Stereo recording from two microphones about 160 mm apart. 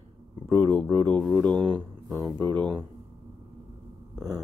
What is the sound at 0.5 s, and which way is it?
Speech, 15° left (ahead or behind).